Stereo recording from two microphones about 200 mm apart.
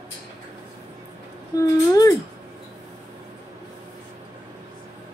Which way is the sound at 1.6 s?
15° left (ahead or behind).